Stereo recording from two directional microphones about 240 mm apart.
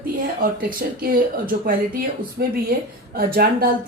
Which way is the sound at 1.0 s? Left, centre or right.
Right.